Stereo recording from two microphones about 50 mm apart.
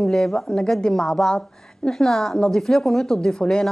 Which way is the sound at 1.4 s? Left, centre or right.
Centre.